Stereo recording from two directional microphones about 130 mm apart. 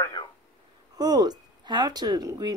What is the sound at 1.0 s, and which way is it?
Speech, 30° right (ahead or behind).